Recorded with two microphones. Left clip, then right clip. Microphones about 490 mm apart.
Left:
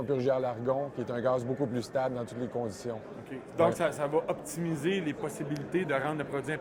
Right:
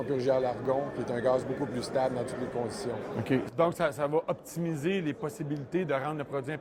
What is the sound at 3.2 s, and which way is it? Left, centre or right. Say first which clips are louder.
Speech: even; right.